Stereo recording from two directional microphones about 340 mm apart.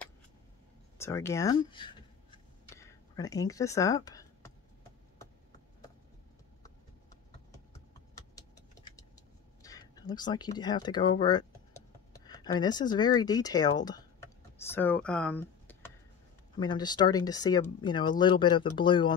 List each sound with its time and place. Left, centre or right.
0.9 s writing: centre
7.7 s vehicle: centre
9.6 s speech: centre